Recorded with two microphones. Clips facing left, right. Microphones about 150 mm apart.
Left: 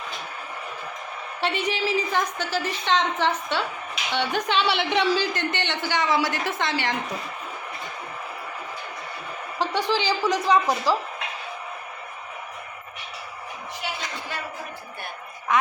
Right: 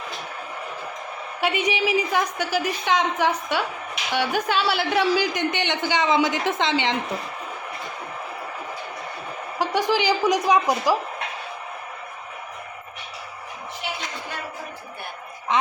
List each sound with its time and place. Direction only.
1.4 s a man's voice: 10° right (ahead or behind)
9.6 s a woman's voice: 15° right (ahead or behind)